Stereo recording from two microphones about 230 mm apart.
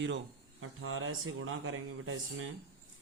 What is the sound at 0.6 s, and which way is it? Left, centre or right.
Speech, right.